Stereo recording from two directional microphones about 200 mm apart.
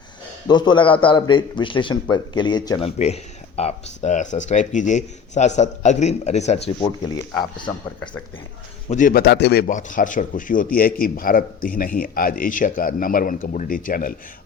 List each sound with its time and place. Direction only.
0.4 s a man's voice: 20° left (ahead or behind)
8.9 s a man's voice: 40° left (ahead or behind)